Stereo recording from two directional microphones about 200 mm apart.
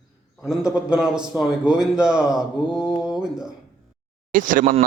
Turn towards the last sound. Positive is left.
turn(degrees=-40)  # may be behind; listen again after turning